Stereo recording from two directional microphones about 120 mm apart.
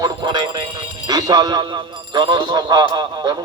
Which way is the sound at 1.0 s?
35° right (ahead or behind).